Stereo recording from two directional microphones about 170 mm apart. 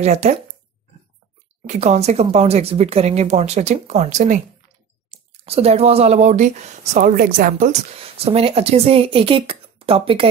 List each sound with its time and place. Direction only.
0.0 s speech: 40° right (ahead or behind)
1.7 s speech: 40° right (ahead or behind)
5.4 s speech: 35° right (ahead or behind)
7.9 s speech: 35° right (ahead or behind)